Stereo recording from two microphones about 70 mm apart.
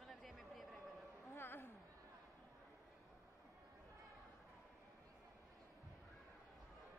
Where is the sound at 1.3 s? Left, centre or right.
Left.